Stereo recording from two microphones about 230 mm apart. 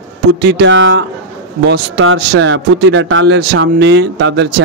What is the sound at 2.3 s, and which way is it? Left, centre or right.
Speech, right.